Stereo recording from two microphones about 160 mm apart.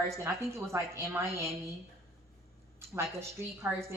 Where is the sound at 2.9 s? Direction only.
15° right (ahead or behind).